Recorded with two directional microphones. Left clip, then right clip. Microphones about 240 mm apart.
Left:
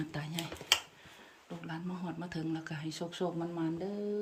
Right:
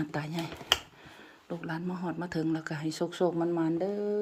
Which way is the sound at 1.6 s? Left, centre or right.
Right.